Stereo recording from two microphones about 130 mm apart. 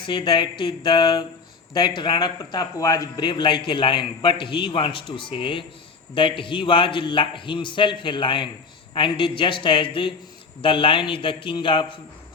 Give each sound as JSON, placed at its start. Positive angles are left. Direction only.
{"t": 0.0, "sound": "speech", "side_deg": 40}